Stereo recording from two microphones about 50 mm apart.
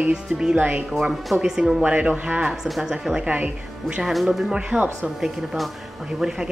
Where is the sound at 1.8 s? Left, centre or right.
Right.